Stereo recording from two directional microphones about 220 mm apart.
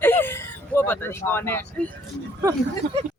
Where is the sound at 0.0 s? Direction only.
10° left (ahead or behind).